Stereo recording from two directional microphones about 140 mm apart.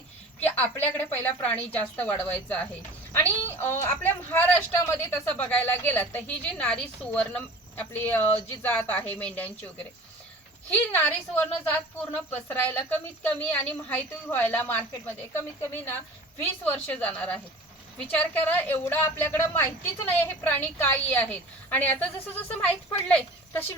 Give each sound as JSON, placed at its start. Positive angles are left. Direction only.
{"t": 0.9, "sound": "a woman's voice", "side_deg": 15}
{"t": 10.9, "sound": "a woman's voice", "side_deg": 15}